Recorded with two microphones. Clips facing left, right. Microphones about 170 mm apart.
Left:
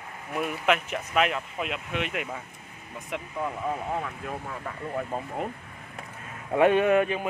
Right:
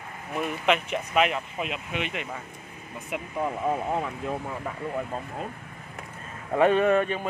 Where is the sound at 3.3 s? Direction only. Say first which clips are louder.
Right 4 dB; 20° right (ahead or behind).